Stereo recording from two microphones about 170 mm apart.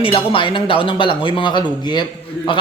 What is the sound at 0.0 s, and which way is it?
A man's voice, 30° left (ahead or behind).